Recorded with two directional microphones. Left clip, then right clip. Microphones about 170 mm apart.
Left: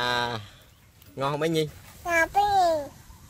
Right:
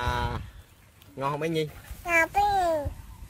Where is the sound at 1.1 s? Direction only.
50° left (ahead or behind).